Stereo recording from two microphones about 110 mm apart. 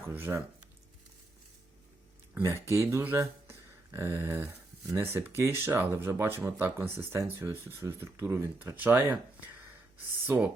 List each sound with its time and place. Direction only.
0.0 s speech: 20° right (ahead or behind)
2.3 s speech: 25° right (ahead or behind)
10.2 s speech: 15° right (ahead or behind)